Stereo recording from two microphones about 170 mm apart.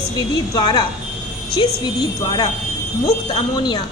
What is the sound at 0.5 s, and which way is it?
Speech, 25° left (ahead or behind).